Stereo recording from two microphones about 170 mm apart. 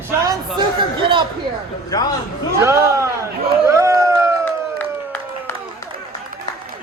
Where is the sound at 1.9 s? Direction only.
20° left (ahead or behind).